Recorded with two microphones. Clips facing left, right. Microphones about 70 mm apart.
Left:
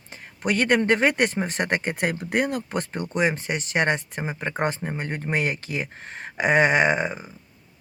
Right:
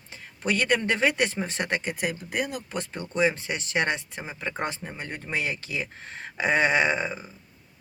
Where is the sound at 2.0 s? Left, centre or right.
Left.